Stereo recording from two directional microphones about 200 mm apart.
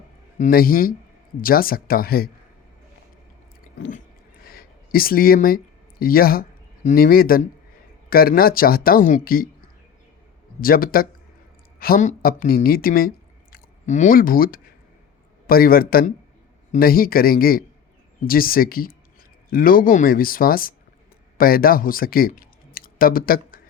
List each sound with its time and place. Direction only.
0.3 s speech: 40° left (ahead or behind)
4.4 s a sound: 45° left (ahead or behind)
6.0 s speech: 45° left (ahead or behind)
10.6 s speech: 45° left (ahead or behind)